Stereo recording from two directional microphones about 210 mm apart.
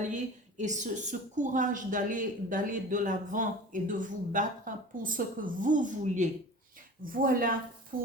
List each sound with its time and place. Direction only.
0.0 s a woman's voice: 35° right (ahead or behind)
7.9 s stir: 45° right (ahead or behind)